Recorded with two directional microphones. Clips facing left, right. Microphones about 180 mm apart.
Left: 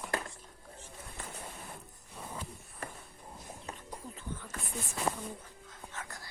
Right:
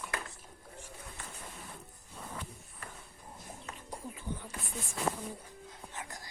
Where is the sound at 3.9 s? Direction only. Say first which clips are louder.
Right 5 dB; 10° right (ahead or behind).